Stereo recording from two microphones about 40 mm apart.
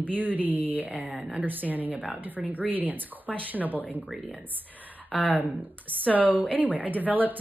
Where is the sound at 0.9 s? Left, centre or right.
Right.